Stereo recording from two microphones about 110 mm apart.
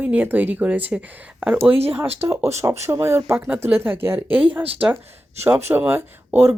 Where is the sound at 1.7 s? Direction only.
60° right (ahead or behind).